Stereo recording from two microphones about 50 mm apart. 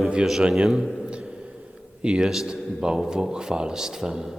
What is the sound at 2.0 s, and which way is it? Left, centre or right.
Speech, centre.